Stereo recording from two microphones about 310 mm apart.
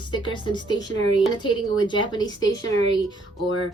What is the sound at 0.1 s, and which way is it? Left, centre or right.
Speech, centre.